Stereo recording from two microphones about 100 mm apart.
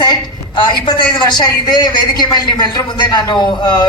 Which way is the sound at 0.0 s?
50° left (ahead or behind).